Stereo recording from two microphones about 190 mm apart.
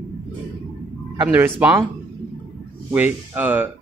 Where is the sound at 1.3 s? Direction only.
10° right (ahead or behind).